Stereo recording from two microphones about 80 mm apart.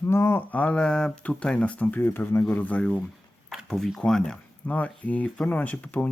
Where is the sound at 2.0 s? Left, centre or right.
Left.